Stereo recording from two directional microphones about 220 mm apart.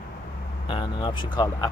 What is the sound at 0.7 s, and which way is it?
Vehicle, 20° left (ahead or behind).